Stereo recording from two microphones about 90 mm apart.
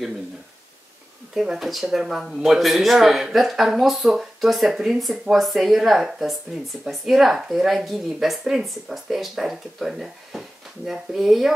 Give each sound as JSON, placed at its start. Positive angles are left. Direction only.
{"t": 1.3, "sound": "speech", "side_deg": -5}